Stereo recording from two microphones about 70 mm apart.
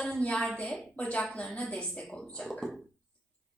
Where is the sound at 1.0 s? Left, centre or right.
Centre.